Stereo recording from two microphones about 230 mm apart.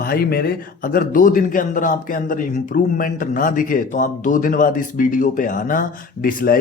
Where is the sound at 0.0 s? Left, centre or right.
Left.